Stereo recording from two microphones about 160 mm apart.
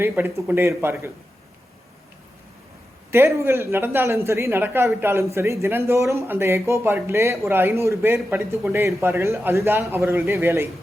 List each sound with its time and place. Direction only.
0.0 s speech: 15° right (ahead or behind)
3.1 s speech: 15° right (ahead or behind)